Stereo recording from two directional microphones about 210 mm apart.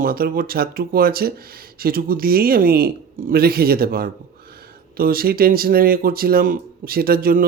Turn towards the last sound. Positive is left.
turn(degrees=-45)  # may be behind; listen again after turning